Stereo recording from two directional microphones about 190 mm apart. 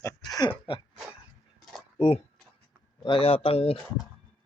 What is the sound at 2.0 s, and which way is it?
Speech, 30° left (ahead or behind).